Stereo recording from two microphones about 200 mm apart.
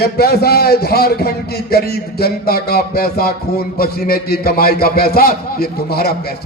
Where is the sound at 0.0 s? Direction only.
50° left (ahead or behind).